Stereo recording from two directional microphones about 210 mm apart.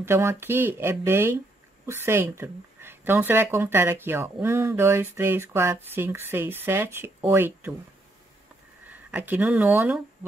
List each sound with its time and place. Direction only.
0.0 s speech: 10° right (ahead or behind)
8.8 s speech: 10° right (ahead or behind)